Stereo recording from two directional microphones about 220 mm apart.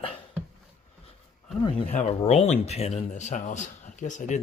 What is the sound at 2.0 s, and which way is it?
Speech, 30° left (ahead or behind).